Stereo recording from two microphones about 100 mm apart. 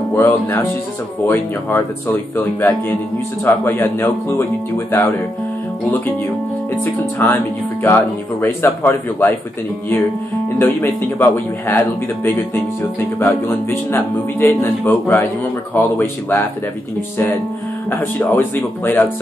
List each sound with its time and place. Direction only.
0.2 s speech: 20° left (ahead or behind)
6.8 s speech: 20° left (ahead or behind)
10.6 s speech: 20° left (ahead or behind)
13.2 s speech: 25° left (ahead or behind)
17.8 s speech: 20° left (ahead or behind)